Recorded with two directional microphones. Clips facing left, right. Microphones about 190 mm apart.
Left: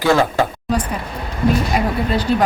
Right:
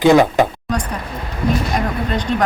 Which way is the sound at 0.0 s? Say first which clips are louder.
Right 4 dB; 20° right (ahead or behind).